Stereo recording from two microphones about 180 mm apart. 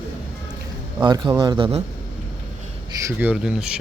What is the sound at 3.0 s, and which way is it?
Speech, 15° right (ahead or behind).